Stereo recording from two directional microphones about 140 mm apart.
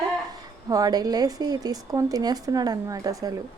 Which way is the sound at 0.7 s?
25° right (ahead or behind).